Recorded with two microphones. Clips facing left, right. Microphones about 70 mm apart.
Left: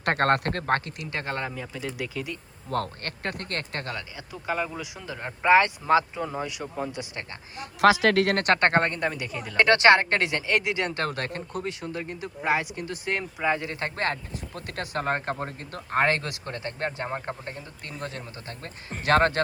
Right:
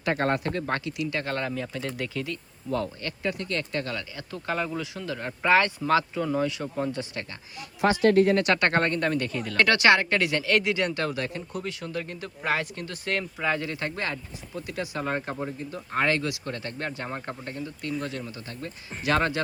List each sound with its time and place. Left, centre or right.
0.0 s speech: left
1.1 s speech: left
1.5 s speech: centre
2.6 s speech: left
4.3 s speech: centre
7.8 s a man's voice: left
8.4 s speech: left
8.6 s speech: left
9.6 s speech: left
10.9 s speech: left
11.6 s speech: left
13.7 s speech: left